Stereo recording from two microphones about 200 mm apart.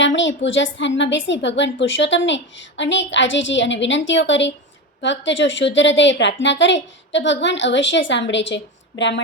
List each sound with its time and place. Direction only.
0.2 s a woman's voice: 65° left (ahead or behind)